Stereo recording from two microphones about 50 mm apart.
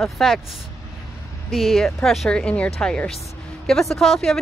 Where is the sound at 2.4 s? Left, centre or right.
Left.